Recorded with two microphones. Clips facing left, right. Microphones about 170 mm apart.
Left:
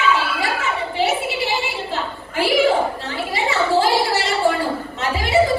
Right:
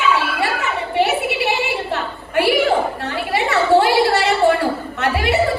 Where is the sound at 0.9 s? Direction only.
60° right (ahead or behind).